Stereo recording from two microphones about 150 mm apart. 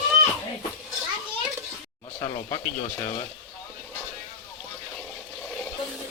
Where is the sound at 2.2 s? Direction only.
25° left (ahead or behind).